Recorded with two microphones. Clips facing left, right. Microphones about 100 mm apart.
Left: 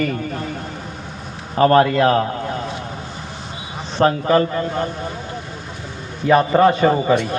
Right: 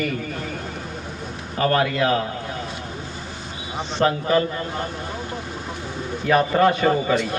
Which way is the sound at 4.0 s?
35° left (ahead or behind).